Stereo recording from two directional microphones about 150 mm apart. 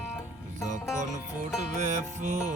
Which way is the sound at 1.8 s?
50° right (ahead or behind).